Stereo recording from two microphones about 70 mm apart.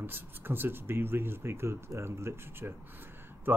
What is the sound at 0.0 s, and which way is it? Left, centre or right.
Speech, right.